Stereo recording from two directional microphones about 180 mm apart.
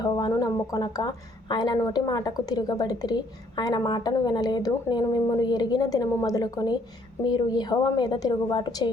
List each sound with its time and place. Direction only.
0.0 s speech: 20° left (ahead or behind)